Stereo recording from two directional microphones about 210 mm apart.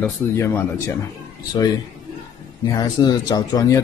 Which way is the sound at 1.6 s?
20° left (ahead or behind).